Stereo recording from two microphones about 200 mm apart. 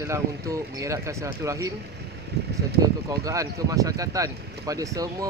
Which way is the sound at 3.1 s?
15° right (ahead or behind).